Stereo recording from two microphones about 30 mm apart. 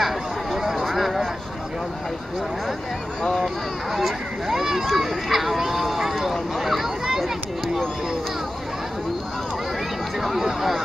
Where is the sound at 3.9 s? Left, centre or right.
Centre.